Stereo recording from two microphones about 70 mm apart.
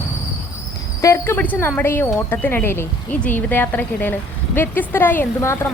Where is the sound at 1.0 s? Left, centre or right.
Left.